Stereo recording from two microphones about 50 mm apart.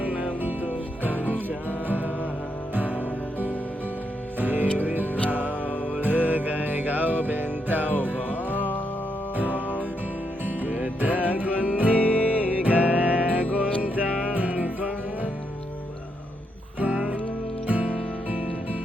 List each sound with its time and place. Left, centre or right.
0.0 s music: right
0.4 s music: right
2.7 s music: right
4.4 s music: right
8.5 s music: left
10.4 s music: right
11.9 s music: left
12.6 s music: right
14.1 s music: centre
14.3 s music: right
16.8 s music: right